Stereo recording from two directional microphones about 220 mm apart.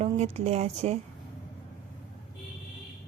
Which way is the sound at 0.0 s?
30° right (ahead or behind).